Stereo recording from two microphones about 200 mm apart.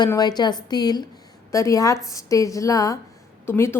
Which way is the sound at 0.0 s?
20° left (ahead or behind).